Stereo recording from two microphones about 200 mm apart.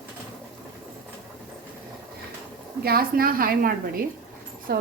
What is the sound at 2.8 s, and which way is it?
A woman's voice, 50° right (ahead or behind).